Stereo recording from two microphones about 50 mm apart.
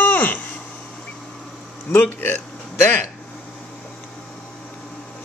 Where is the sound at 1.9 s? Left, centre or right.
Left.